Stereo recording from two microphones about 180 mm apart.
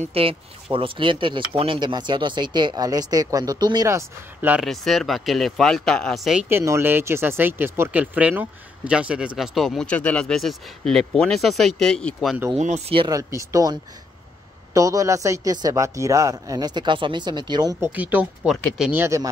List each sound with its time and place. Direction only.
0.1 s speech: 30° right (ahead or behind); by 6.4 s centre (ahead or behind)
6.5 s speech: 15° right (ahead or behind); by 12.4 s 5° left (ahead or behind)
12.5 s speech: 40° right (ahead or behind)
13.3 s speech: 15° right (ahead or behind)
17.9 s speech: 10° right (ahead or behind)